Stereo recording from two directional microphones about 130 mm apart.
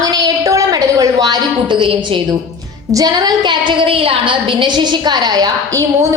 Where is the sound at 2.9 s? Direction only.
30° right (ahead or behind).